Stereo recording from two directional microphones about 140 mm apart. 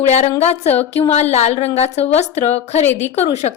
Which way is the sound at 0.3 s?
50° left (ahead or behind).